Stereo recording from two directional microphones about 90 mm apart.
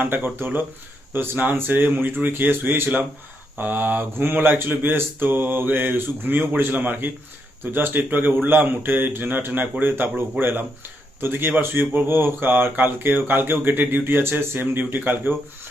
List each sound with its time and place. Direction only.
0.0 s speech: 20° right (ahead or behind)